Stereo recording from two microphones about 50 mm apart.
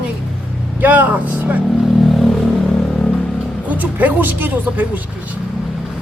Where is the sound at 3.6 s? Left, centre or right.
Right.